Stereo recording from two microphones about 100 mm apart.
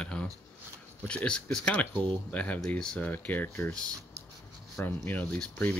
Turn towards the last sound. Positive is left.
turn(degrees=10)  # may be behind; listen again after turning